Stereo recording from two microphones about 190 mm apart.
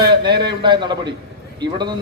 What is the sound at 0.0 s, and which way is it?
A man's voice, 25° right (ahead or behind).